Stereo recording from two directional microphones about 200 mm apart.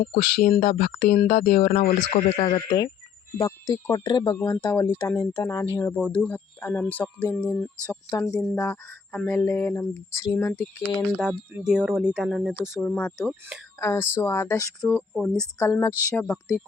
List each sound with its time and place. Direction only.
0.0 s speech: 35° left (ahead or behind)
3.3 s speech: 15° left (ahead or behind)
4.4 s speech: 10° left (ahead or behind)
13.7 s speech: 15° left (ahead or behind)
15.5 s speech: 15° left (ahead or behind)